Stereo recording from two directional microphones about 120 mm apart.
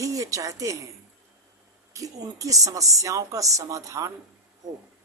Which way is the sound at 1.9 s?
30° right (ahead or behind).